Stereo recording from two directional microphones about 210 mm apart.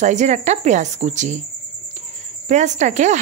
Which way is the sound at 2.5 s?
35° right (ahead or behind).